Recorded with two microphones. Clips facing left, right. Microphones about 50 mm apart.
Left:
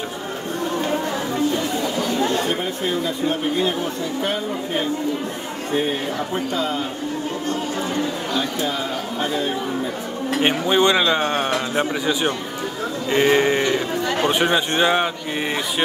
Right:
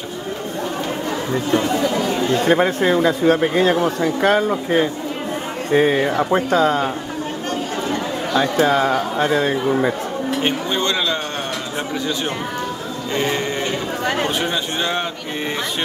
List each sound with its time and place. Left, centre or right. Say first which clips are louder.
2.4 s speech: right 7 dB; right
5.8 s speech: right 7 dB; right
8.4 s a man's voice: right 10 dB; right
10.4 s speech: left 6 dB; centre
13.1 s sheep: left 5 dB; left
14.2 s speech: left 3 dB; left